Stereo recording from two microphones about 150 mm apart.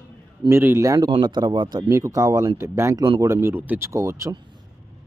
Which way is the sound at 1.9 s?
20° right (ahead or behind).